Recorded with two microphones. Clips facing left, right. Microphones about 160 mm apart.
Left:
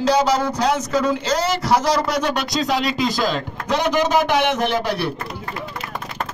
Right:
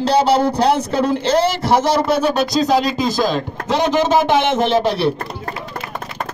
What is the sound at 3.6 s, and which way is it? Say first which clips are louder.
Speech: right 3 dB; 25° right (ahead or behind).